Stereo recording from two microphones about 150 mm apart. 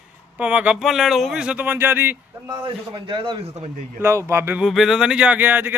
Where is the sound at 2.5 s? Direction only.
35° right (ahead or behind).